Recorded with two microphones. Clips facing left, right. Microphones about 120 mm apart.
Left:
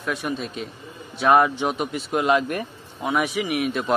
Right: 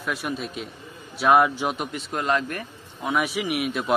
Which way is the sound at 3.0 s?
Centre (ahead or behind).